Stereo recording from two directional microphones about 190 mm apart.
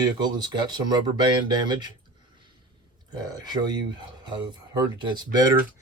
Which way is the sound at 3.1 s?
20° right (ahead or behind).